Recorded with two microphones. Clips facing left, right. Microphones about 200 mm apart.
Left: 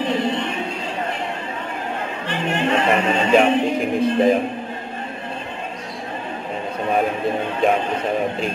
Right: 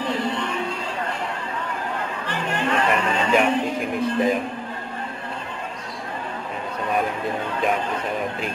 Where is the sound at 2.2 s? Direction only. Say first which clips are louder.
Left 5 dB; 25° left (ahead or behind).